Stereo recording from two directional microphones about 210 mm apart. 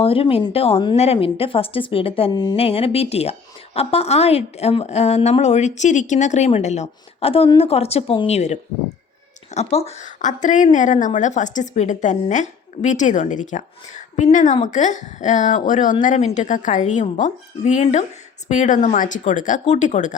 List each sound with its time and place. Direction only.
0.0 s a woman's voice: 25° left (ahead or behind)
9.6 s a woman's voice: 30° left (ahead or behind)